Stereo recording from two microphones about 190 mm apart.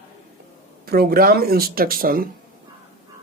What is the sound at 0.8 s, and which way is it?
Speech, 55° right (ahead or behind).